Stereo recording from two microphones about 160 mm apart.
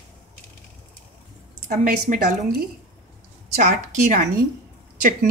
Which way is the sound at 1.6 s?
55° right (ahead or behind).